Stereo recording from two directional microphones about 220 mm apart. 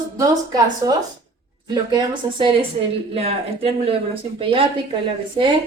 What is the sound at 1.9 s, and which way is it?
Speech, 20° right (ahead or behind).